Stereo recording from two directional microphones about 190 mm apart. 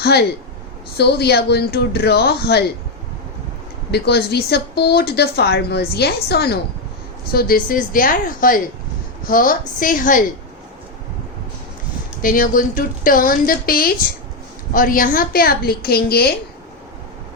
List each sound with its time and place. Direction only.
0.0 s speech: 55° left (ahead or behind)
3.9 s a woman's voice: 60° left (ahead or behind)
12.2 s a woman's voice: 45° left (ahead or behind)